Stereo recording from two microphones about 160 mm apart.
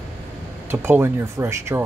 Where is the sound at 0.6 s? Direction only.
15° right (ahead or behind).